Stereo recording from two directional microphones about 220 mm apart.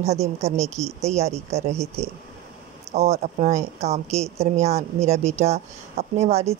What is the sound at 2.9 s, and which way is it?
A woman's voice, 30° right (ahead or behind).